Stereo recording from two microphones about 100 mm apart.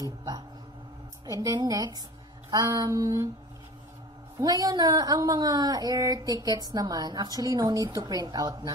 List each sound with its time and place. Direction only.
0.0 s a woman's voice: 40° right (ahead or behind)
4.4 s a woman's voice: 35° right (ahead or behind)